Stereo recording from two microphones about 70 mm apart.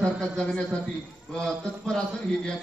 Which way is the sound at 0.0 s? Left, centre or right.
Centre.